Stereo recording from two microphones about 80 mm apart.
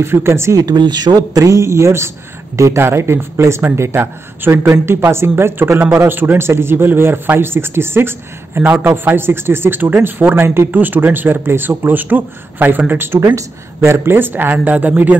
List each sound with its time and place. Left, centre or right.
0.0 s speech: right
0.7 s speech: right
13.2 s speech: right; by 15.1 s centre